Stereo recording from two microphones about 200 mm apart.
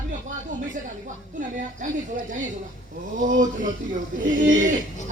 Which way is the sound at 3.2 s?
40° right (ahead or behind).